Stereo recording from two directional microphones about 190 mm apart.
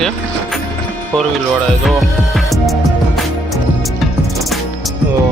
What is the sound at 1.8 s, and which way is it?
Speech, centre (ahead or behind).